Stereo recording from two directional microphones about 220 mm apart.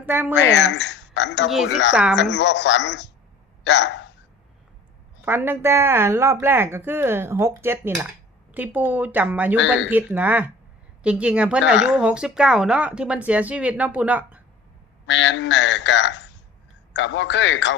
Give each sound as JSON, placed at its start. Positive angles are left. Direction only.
{"t": 0.0, "sound": "speech", "side_deg": -10}
{"t": 0.3, "sound": "speech", "side_deg": 55}
{"t": 1.9, "sound": "speech", "side_deg": -5}
{"t": 2.3, "sound": "speech", "side_deg": 55}
{"t": 5.2, "sound": "speech", "side_deg": -10}
{"t": 15.0, "sound": "a man's voice", "side_deg": 55}